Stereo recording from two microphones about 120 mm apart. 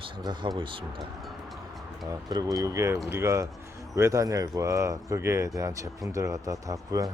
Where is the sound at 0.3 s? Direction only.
40° right (ahead or behind).